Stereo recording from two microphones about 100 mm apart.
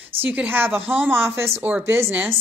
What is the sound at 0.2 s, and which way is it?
Speech, 15° right (ahead or behind).